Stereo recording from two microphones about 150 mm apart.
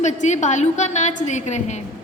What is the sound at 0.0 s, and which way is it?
A woman's voice, 50° left (ahead or behind).